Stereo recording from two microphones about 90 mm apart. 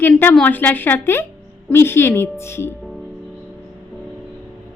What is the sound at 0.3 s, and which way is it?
A woman's voice, 20° left (ahead or behind).